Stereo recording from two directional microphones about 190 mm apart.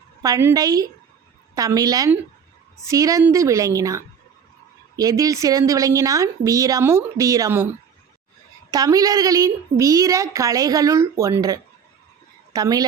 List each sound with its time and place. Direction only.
0.2 s a woman's voice: 15° right (ahead or behind)
8.7 s a woman's voice: 20° right (ahead or behind)